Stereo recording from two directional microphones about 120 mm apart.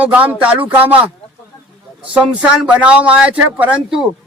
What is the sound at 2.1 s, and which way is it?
Speech, 10° right (ahead or behind).